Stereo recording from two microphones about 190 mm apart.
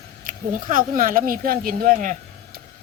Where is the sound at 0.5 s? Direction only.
45° right (ahead or behind).